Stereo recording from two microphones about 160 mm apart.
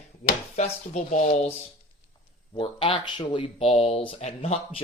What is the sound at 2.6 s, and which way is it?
Speech, 35° left (ahead or behind).